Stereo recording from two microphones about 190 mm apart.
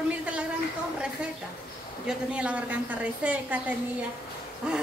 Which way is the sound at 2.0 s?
5° right (ahead or behind).